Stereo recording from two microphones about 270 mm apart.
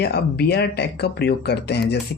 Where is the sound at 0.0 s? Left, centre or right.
Left.